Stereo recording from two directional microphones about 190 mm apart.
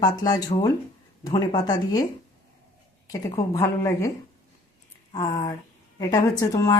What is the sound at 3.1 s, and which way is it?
A woman's voice, 20° left (ahead or behind).